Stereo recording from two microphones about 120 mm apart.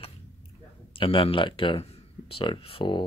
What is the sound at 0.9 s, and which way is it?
Speech, 50° left (ahead or behind).